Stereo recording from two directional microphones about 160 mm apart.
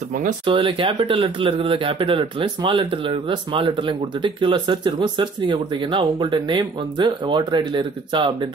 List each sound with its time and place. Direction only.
0.5 s speech: 30° right (ahead or behind)